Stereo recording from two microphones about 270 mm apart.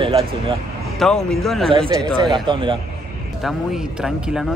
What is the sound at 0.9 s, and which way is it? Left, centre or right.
Speech, centre.